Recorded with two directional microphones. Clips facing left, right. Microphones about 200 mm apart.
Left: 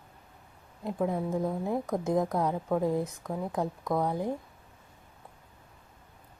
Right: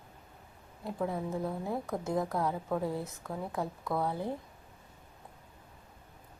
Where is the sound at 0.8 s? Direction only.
15° left (ahead or behind).